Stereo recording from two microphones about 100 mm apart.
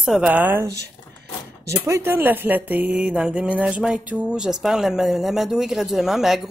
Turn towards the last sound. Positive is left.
turn(degrees=-5)  # may be behind; listen again after turning